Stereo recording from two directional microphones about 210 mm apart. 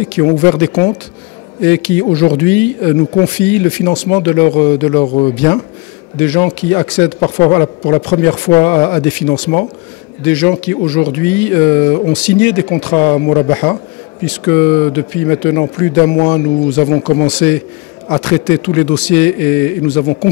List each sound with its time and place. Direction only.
0.1 s speech: 10° left (ahead or behind)
5.0 s speech: 25° left (ahead or behind)
5.3 s speech: 5° left (ahead or behind)
14.2 s a man's voice: 5° left (ahead or behind)